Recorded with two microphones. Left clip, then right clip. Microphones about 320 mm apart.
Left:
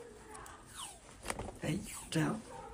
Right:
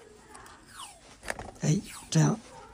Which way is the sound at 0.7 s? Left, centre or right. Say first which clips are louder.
Right 5 dB; centre.